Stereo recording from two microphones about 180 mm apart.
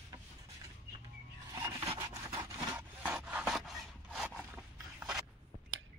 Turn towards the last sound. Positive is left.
turn(degrees=-5)  # may be behind; listen again after turning